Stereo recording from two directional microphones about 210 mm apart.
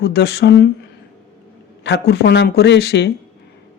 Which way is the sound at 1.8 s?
50° left (ahead or behind).